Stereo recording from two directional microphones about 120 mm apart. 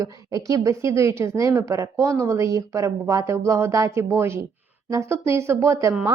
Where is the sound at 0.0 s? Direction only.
30° right (ahead or behind).